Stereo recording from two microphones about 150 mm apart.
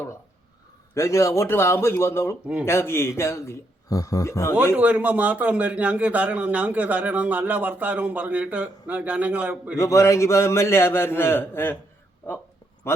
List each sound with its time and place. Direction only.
0.9 s a man's voice: 20° left (ahead or behind)
4.8 s a man's voice: 10° right (ahead or behind)
9.7 s a man's voice: 20° left (ahead or behind)